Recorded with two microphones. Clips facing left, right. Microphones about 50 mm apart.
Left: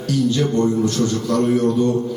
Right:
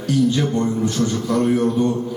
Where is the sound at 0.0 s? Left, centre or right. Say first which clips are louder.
Right 1 dB; centre.